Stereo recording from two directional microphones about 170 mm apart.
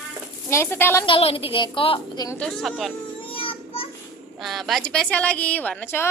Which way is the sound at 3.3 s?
30° left (ahead or behind).